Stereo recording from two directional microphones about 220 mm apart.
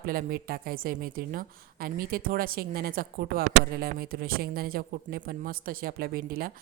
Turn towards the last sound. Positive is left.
turn(degrees=-40)  # may be behind; listen again after turning